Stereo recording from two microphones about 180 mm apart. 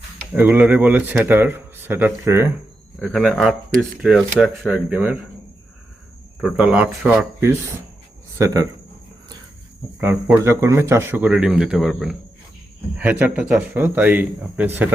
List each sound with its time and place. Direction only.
0.3 s speech: 10° right (ahead or behind)
3.0 s speech: centre (ahead or behind)
6.4 s speech: 5° right (ahead or behind)
8.4 s speech: 15° right (ahead or behind)
10.0 s speech: 10° right (ahead or behind)